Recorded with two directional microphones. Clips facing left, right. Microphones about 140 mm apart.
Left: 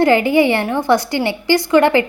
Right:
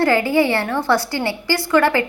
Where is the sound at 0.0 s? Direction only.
20° left (ahead or behind).